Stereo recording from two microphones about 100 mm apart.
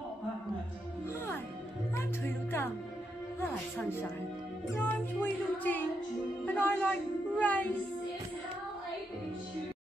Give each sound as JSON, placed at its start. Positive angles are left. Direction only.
{"t": 2.0, "sound": "music", "side_deg": 25}
{"t": 4.6, "sound": "music", "side_deg": 20}
{"t": 6.4, "sound": "speech", "side_deg": 20}